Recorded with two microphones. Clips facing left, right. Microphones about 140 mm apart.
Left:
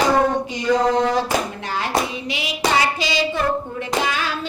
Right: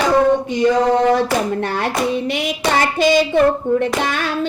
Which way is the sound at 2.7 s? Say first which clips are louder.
Right 8 dB; 50° right (ahead or behind).